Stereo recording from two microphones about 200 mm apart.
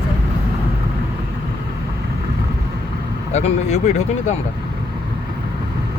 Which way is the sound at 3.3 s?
35° left (ahead or behind).